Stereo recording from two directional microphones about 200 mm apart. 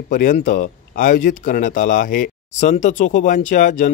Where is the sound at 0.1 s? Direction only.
40° left (ahead or behind).